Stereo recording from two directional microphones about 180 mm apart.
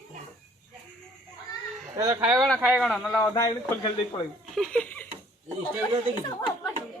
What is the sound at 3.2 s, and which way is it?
Speech, 20° left (ahead or behind).